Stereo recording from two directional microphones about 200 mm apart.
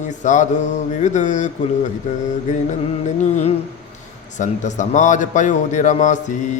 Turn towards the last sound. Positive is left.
turn(degrees=40)  # may be behind; listen again after turning